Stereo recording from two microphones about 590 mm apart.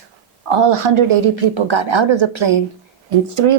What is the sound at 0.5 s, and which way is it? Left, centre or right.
A woman's voice, right.